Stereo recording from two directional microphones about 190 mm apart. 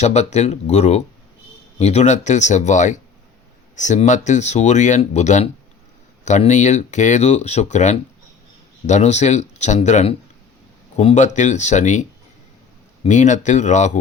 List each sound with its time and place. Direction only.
0.0 s speech: 35° left (ahead or behind)